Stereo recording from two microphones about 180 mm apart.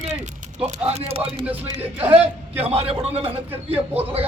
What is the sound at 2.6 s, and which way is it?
Speech, 35° right (ahead or behind).